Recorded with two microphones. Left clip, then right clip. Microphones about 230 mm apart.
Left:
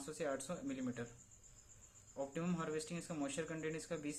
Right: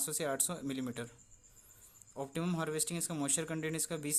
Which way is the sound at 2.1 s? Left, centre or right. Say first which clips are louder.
Right 4 dB; right.